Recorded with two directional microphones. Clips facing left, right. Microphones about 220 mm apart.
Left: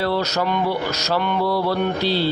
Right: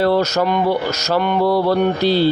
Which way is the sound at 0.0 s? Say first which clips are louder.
Right 6 dB; 45° right (ahead or behind).